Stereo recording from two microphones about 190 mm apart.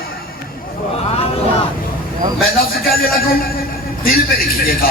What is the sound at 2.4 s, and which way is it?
Speech, 50° left (ahead or behind).